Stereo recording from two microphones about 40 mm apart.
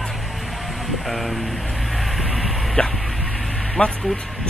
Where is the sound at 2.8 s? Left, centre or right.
Left.